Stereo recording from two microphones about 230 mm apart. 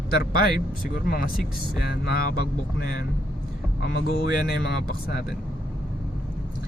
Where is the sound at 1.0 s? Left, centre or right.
Left.